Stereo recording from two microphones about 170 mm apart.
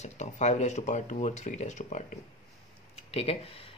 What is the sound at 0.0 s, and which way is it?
Speech, 40° left (ahead or behind).